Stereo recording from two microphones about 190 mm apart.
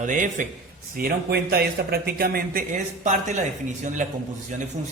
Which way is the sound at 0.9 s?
55° right (ahead or behind).